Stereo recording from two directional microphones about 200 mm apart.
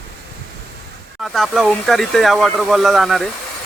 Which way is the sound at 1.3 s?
Centre (ahead or behind).